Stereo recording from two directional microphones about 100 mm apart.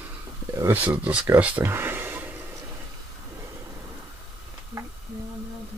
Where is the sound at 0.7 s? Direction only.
15° right (ahead or behind).